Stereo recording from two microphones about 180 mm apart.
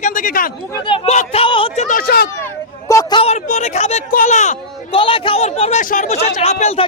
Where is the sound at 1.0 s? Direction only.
35° left (ahead or behind).